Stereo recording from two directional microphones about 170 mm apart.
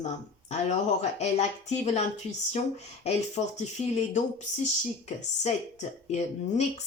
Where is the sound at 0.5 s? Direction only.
40° left (ahead or behind).